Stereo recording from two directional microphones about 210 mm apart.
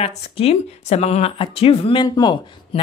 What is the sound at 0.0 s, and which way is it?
Speech, 30° left (ahead or behind).